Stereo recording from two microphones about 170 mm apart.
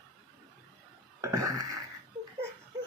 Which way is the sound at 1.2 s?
20° right (ahead or behind).